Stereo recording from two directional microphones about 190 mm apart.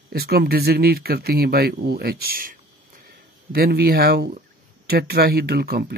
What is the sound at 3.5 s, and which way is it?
Speech, 55° right (ahead or behind).